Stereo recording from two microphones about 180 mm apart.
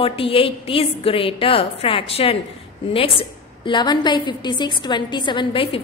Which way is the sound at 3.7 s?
25° left (ahead or behind).